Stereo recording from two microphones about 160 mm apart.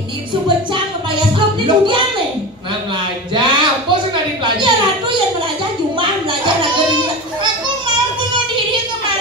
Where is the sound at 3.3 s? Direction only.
30° right (ahead or behind).